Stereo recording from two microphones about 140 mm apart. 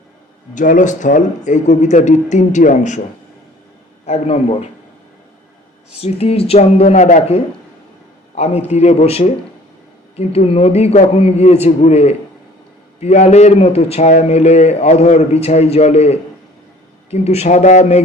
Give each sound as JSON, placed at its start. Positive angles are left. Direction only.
{"t": 0.5, "sound": "speech", "side_deg": 65}
{"t": 4.0, "sound": "a man's voice", "side_deg": 50}
{"t": 6.0, "sound": "a man's voice", "side_deg": 45}
{"t": 8.7, "sound": "a man's voice", "side_deg": 50}